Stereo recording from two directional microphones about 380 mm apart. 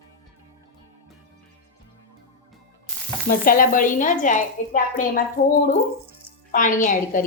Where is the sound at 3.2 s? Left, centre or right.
Left.